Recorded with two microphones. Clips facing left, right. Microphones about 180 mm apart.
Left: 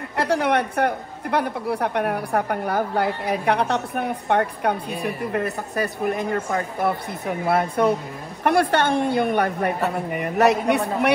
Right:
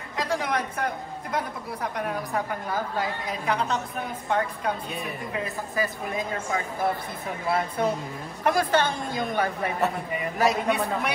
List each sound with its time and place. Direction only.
0.1 s a woman's voice: 70° left (ahead or behind)